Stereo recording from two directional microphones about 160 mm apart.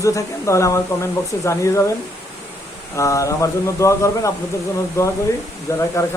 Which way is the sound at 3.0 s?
20° left (ahead or behind).